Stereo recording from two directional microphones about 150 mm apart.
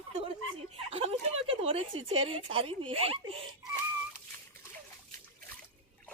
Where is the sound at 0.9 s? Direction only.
40° right (ahead or behind).